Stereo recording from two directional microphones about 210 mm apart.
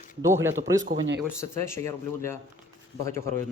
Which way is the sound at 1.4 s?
10° left (ahead or behind).